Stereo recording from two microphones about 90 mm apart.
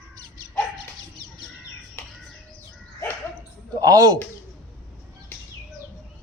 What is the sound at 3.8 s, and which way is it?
Speech, 45° right (ahead or behind).